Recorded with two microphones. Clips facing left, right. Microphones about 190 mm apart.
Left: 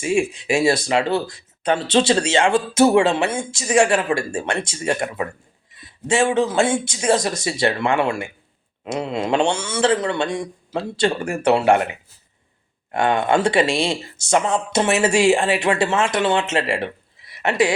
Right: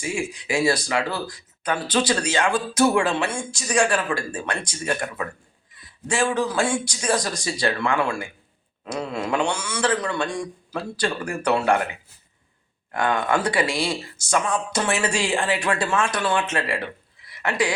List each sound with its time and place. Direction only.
0.0 s speech: 25° left (ahead or behind)
12.9 s speech: 25° left (ahead or behind)